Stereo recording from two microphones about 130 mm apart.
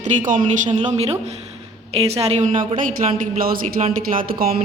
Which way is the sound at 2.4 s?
85° right.